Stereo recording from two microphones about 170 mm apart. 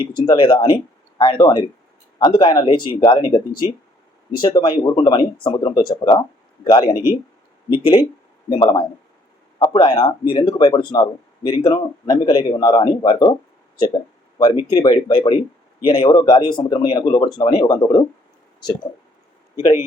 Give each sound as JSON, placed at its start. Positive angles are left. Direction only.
{"t": 0.2, "sound": "a man's voice", "side_deg": 30}
{"t": 4.4, "sound": "a man's voice", "side_deg": 25}